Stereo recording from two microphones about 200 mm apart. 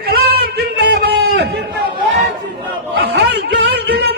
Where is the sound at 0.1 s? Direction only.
50° right (ahead or behind).